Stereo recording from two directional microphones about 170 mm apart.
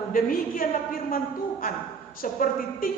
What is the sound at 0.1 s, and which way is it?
Speech, 55° left (ahead or behind).